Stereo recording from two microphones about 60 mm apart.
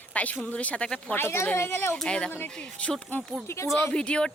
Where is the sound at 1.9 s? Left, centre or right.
Centre.